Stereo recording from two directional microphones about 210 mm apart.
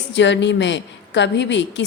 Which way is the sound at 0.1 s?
60° left (ahead or behind).